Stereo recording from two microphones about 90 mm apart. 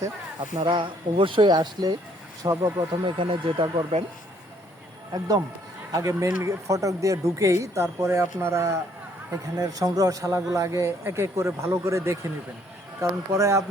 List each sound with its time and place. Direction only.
0.5 s speech: 65° right (ahead or behind)
1.5 s speech: 50° right (ahead or behind)
2.4 s speech: 35° right (ahead or behind)
2.7 s speech: 60° right (ahead or behind)
5.9 s speech: 40° right (ahead or behind)